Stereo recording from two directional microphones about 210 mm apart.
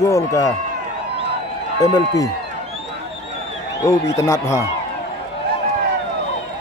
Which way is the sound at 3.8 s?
15° left (ahead or behind).